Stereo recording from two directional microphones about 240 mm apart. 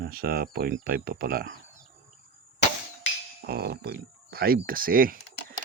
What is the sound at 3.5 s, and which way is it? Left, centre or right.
Speech, right.